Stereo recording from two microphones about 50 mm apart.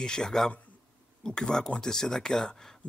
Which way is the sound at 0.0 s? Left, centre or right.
Centre.